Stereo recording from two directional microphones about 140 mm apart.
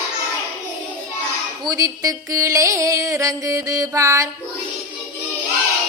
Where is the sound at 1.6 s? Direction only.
25° right (ahead or behind).